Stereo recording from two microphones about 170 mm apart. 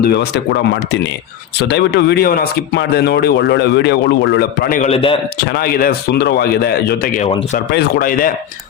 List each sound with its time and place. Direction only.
0.0 s speech: 75° left (ahead or behind)
4.8 s a man's voice: 35° left (ahead or behind)
5.5 s speech: 65° left (ahead or behind)